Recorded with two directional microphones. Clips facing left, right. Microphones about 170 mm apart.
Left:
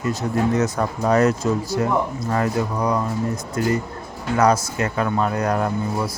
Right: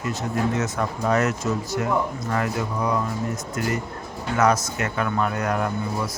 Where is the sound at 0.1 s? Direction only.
35° left (ahead or behind).